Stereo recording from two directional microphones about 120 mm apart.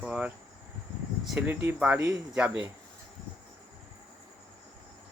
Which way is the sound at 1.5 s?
20° right (ahead or behind).